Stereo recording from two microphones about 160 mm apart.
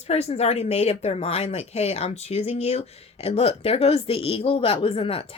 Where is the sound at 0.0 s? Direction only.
40° left (ahead or behind).